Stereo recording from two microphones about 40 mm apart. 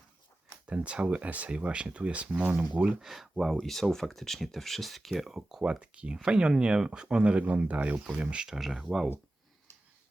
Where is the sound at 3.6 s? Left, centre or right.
Centre.